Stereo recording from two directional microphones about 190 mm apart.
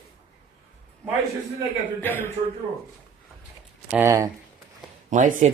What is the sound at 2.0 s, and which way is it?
Speech, 10° left (ahead or behind).